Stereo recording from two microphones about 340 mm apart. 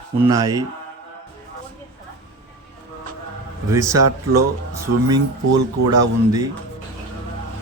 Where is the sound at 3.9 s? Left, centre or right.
Right.